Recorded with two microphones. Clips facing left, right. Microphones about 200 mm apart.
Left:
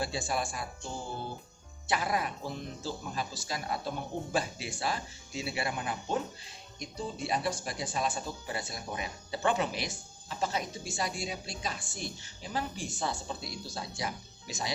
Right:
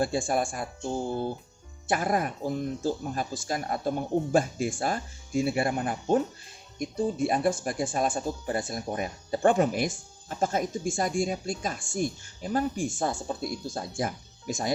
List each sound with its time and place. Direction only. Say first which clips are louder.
0.0 s speech: right 7 dB; 50° right (ahead or behind)